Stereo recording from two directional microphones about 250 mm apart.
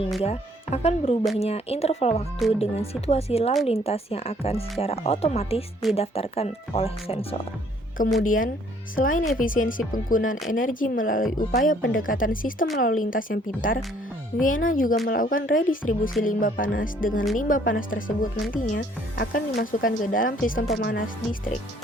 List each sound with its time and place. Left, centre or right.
0.2 s speech: left